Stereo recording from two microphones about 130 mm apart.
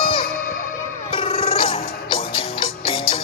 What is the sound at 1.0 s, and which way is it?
Music, 45° left (ahead or behind).